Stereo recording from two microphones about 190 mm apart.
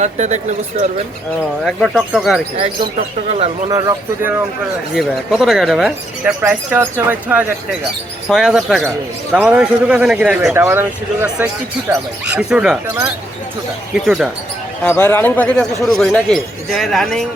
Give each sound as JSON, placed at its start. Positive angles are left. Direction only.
{"t": 0.0, "sound": "speech", "side_deg": -40}
{"t": 1.6, "sound": "speech", "side_deg": 0}
{"t": 3.7, "sound": "a man's voice", "side_deg": -15}
{"t": 4.9, "sound": "a man's voice", "side_deg": 0}
{"t": 13.9, "sound": "speech", "side_deg": 0}
{"t": 14.8, "sound": "speech", "side_deg": 10}